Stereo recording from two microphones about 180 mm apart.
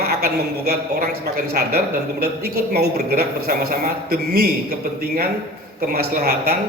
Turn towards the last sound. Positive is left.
turn(degrees=-60)  # may be behind; listen again after turning